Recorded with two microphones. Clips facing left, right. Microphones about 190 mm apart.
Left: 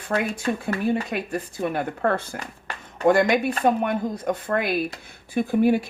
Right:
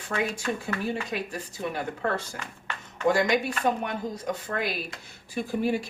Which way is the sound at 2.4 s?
40° left (ahead or behind).